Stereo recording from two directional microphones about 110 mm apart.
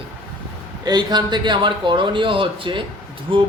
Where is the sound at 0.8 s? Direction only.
40° right (ahead or behind).